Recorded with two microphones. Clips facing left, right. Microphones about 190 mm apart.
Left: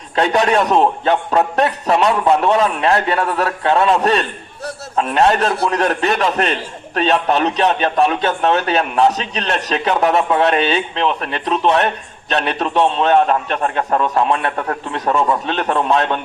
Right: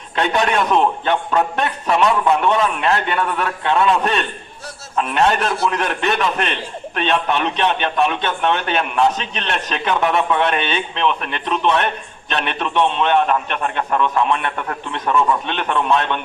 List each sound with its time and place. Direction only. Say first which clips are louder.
0.2 s a man's voice: left 3 dB; 35° left (ahead or behind)